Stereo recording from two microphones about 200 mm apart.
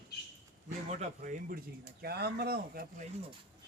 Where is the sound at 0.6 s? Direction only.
35° right (ahead or behind).